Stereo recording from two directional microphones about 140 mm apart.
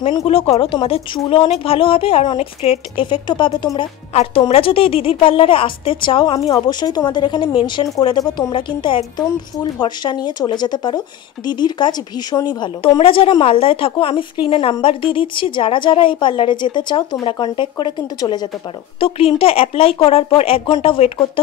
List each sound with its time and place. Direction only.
0.2 s speech: 45° left (ahead or behind)
4.1 s speech: 50° left (ahead or behind)
6.5 s speech: 30° left (ahead or behind)
18.9 s speech: 40° left (ahead or behind)